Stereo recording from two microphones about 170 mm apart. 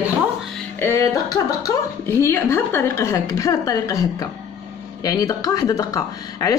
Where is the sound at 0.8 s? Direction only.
20° left (ahead or behind).